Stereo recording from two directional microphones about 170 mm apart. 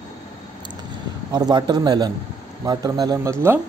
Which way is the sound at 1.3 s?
25° right (ahead or behind).